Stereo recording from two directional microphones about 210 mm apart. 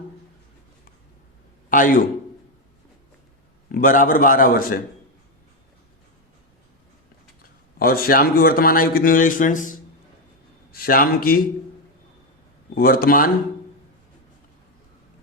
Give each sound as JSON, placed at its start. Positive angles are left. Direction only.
{"t": 1.7, "sound": "a man's voice", "side_deg": 40}
{"t": 3.7, "sound": "speech", "side_deg": 40}
{"t": 7.8, "sound": "speech", "side_deg": 45}
{"t": 12.7, "sound": "speech", "side_deg": 45}